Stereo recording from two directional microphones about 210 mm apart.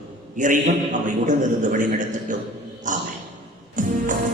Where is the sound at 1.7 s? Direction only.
40° right (ahead or behind).